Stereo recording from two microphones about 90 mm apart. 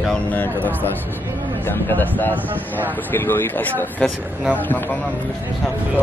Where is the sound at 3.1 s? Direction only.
20° left (ahead or behind).